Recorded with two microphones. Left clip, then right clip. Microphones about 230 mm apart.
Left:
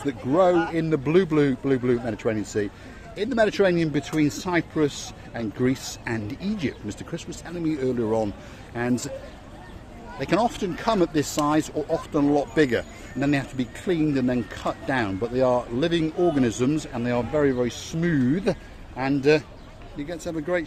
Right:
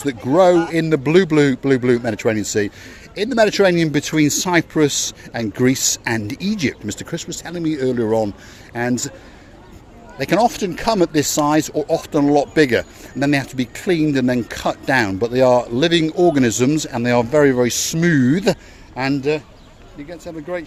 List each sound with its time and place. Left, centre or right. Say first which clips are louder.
0.0 s speech: right 7 dB; right
10.2 s speech: right 7 dB; right
19.3 s speech: even; centre